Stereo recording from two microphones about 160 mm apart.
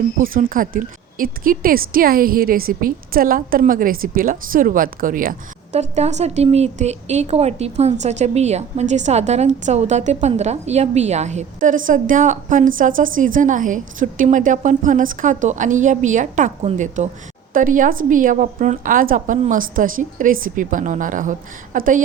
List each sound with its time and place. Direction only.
0.2 s a woman's voice: 60° right (ahead or behind)